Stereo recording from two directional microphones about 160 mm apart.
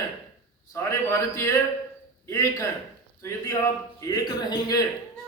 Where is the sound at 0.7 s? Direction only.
20° left (ahead or behind).